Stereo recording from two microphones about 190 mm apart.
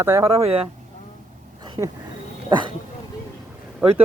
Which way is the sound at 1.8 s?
20° right (ahead or behind).